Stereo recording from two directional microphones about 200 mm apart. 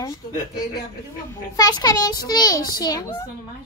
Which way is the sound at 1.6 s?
20° left (ahead or behind).